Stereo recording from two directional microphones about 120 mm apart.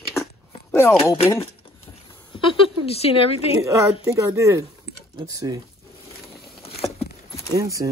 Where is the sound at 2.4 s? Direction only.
50° left (ahead or behind).